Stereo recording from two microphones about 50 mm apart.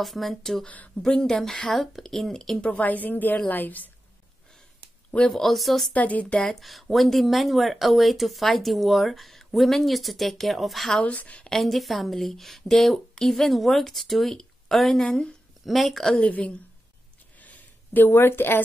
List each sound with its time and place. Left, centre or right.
0.0 s a woman's voice: centre
2.6 s speech: left
5.3 s speech: centre
5.9 s speech: left
6.4 s speech: centre
11.0 s a woman's voice: left
11.4 s speech: centre
15.0 s a woman's voice: centre
15.6 s speech: centre
16.2 s a woman's voice: left
17.4 s a sound: left
18.1 s a woman's voice: left